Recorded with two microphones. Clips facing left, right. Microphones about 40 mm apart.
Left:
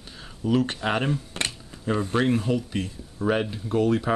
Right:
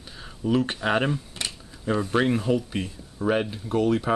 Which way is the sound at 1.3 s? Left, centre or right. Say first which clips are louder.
Left 4 dB; left.